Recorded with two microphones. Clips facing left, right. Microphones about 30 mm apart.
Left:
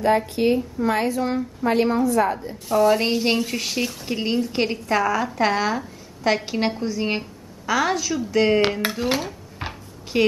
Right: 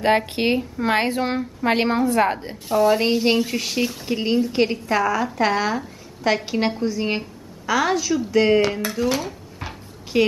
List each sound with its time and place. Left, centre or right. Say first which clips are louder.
0.4 s a woman's voice: left 1 dB; right
2.7 s a woman's voice: right 1 dB; centre
9.0 s speech: right 3 dB; left
10.1 s a woman's voice: right 1 dB; centre